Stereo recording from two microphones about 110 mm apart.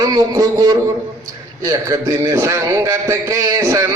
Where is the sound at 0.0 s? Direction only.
30° right (ahead or behind).